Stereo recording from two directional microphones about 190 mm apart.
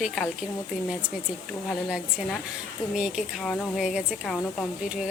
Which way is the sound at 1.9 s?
5° right (ahead or behind).